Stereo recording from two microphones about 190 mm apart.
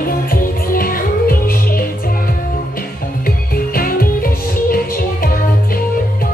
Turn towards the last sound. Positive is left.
turn(degrees=50)  # may be behind; listen again after turning